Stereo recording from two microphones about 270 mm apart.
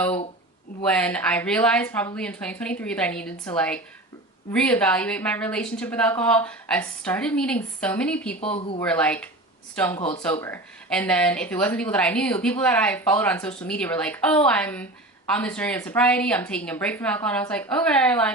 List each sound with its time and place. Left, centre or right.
0.9 s speech: centre
8.4 s speech: left
8.8 s speech: centre